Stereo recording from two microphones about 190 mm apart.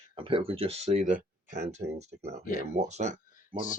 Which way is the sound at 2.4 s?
45° left (ahead or behind).